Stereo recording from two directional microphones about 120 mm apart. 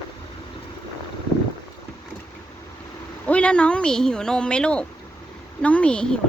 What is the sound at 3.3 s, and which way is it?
Speech, 10° left (ahead or behind).